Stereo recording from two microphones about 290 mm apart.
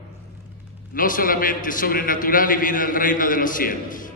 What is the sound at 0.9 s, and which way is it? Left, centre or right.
A man's voice, left.